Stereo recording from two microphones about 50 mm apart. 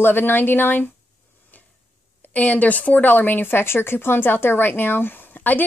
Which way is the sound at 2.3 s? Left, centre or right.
Left.